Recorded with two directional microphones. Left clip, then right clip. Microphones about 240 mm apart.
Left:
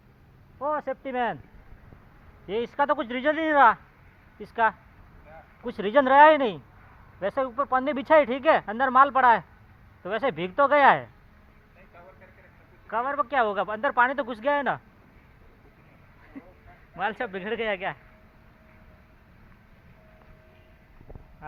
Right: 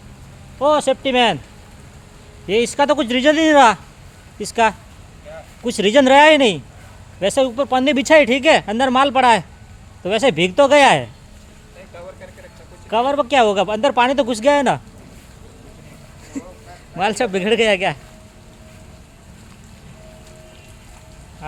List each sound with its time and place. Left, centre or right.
1.0 s speech: centre
2.5 s speech: centre
12.9 s speech: right
16.9 s speech: centre